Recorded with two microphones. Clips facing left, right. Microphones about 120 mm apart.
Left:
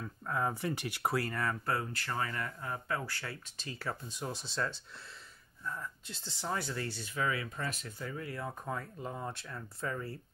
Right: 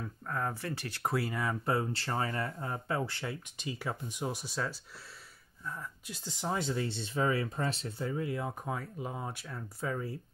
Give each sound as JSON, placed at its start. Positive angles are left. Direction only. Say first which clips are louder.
{"t": 0.3, "sound": "speech", "louder": "left 2 dB", "side_deg": 15}
{"t": 1.0, "sound": "speech", "louder": "right 1 dB", "side_deg": 0}
{"t": 1.7, "sound": "speech", "louder": "right 4 dB", "side_deg": -25}